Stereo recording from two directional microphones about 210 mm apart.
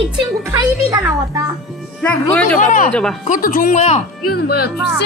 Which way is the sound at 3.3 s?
40° left (ahead or behind).